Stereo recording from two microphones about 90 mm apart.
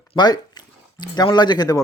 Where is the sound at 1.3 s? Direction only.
55° left (ahead or behind).